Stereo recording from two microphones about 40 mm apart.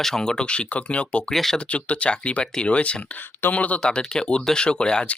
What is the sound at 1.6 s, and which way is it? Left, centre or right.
Speech, left.